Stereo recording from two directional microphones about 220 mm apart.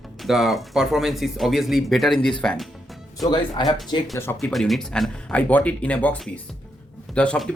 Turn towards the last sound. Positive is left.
turn(degrees=5)  # may be behind; listen again after turning